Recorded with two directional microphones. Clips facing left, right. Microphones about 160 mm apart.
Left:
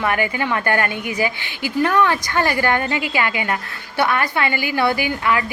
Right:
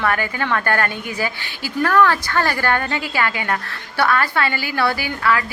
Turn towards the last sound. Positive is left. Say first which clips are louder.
# left 1 dB
turn(degrees=15)  # may be behind; listen again after turning